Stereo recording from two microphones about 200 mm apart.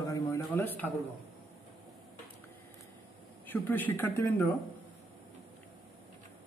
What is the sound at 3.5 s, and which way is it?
A man's voice, 10° left (ahead or behind).